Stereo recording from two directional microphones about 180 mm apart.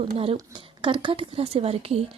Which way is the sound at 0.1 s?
35° right (ahead or behind).